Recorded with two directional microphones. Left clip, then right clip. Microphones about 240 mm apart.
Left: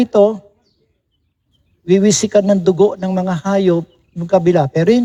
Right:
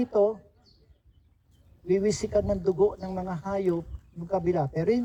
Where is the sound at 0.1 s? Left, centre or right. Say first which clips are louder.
Left 11 dB; left.